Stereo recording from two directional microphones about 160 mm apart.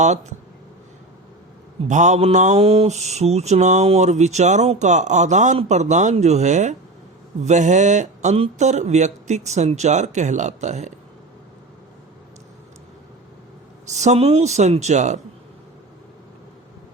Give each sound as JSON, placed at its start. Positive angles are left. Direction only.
{"t": 0.0, "sound": "mantra", "side_deg": -45}
{"t": 1.9, "sound": "mantra", "side_deg": -50}
{"t": 13.9, "sound": "mantra", "side_deg": -45}